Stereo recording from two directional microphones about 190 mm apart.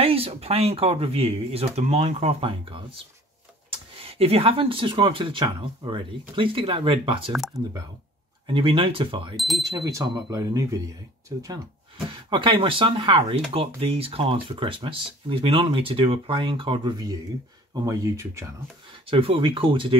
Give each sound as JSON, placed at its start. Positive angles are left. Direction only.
{"t": 0.0, "sound": "speech", "side_deg": -30}
{"t": 8.5, "sound": "speech", "side_deg": -30}
{"t": 19.0, "sound": "speech", "side_deg": -30}